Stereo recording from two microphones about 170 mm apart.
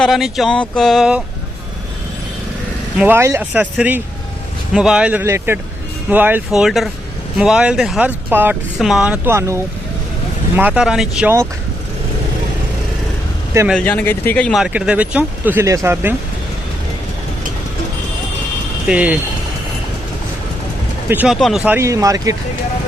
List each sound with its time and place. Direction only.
0.0 s speech: centre (ahead or behind)
3.0 s speech: 15° right (ahead or behind)
13.7 s speech: 5° left (ahead or behind); by 16.1 s 15° right (ahead or behind)
18.9 s speech: 5° right (ahead or behind)
21.1 s speech: 10° right (ahead or behind)